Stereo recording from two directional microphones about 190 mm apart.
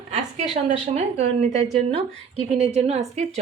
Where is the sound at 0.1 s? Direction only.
35° right (ahead or behind).